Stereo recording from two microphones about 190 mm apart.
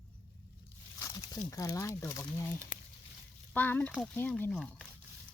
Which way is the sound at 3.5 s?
10° left (ahead or behind).